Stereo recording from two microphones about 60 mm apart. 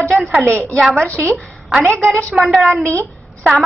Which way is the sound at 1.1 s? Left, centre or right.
Right.